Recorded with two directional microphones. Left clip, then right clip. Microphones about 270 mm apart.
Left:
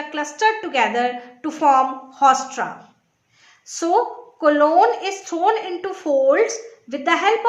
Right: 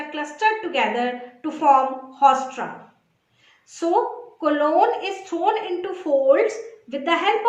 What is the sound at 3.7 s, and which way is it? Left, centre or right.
A woman's voice, left.